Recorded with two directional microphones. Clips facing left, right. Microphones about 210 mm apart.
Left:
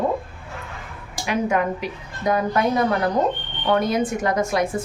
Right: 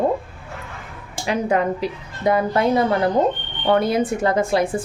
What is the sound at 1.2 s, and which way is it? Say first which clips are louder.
A woman's voice: right 2 dB; 30° right (ahead or behind).